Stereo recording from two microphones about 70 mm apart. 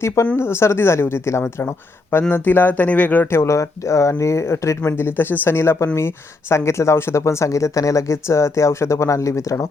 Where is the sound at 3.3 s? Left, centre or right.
Left.